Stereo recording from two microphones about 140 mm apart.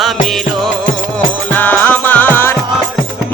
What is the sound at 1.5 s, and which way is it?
Music, 10° left (ahead or behind).